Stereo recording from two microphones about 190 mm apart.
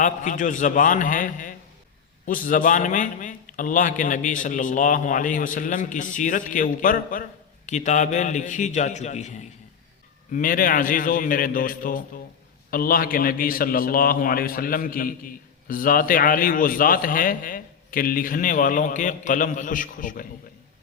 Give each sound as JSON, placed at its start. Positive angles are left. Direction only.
{"t": 0.0, "sound": "a man's voice", "side_deg": 45}
{"t": 10.3, "sound": "a man's voice", "side_deg": 45}